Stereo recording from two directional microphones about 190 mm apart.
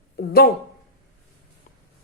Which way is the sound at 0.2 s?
55° left (ahead or behind).